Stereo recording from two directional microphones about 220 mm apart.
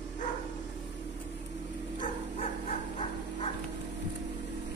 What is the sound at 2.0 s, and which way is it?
Bow-wow, 30° left (ahead or behind).